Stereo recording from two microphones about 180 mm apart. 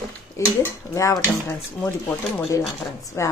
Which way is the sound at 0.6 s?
15° left (ahead or behind).